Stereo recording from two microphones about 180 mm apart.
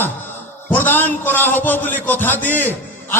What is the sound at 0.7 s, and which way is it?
A man's voice, 10° left (ahead or behind).